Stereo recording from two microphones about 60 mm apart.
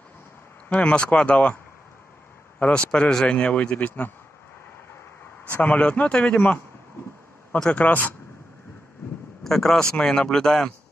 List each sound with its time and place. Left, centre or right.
0.7 s speech: centre
2.6 s speech: left
5.5 s speech: left
7.7 s speech: left
9.4 s speech: centre